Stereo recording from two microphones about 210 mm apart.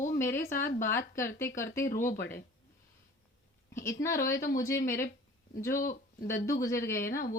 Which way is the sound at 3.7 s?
15° left (ahead or behind).